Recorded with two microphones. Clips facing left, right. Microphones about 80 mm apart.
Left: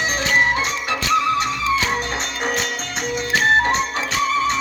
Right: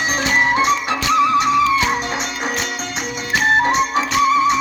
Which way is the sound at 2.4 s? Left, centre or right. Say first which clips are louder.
Even; centre.